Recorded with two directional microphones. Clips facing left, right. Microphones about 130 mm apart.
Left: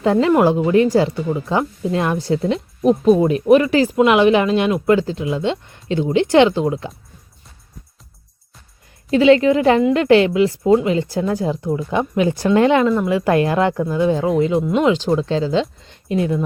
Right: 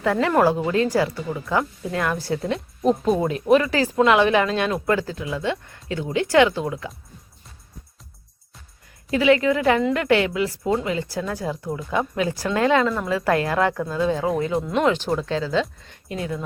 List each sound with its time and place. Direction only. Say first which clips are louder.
0.0 s speech: left 5 dB; 20° left (ahead or behind)
9.0 s speech: left 6 dB; 25° left (ahead or behind)
14.6 s speech: left 5 dB; 5° left (ahead or behind)
14.8 s speech: left 5 dB; 15° left (ahead or behind)
15.8 s a sound: left 10 dB; 25° left (ahead or behind)